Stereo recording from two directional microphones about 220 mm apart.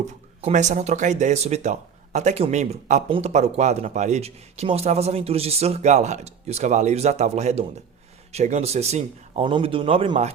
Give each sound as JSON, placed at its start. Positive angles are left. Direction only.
{"t": 0.4, "sound": "speech", "side_deg": -30}